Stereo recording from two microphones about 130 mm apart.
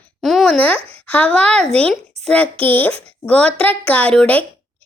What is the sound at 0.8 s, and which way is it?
Speech, 50° right (ahead or behind).